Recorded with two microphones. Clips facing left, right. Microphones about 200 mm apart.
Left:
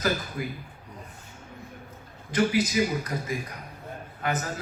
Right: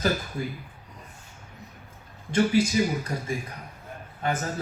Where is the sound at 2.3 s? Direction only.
30° right (ahead or behind).